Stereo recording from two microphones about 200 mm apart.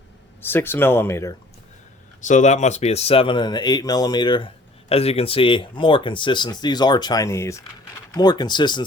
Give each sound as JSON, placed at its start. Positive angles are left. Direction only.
{"t": 0.4, "sound": "speech", "side_deg": 10}
{"t": 2.2, "sound": "speech", "side_deg": 35}